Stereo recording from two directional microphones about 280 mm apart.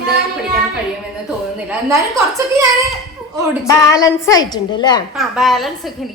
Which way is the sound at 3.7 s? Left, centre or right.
Centre.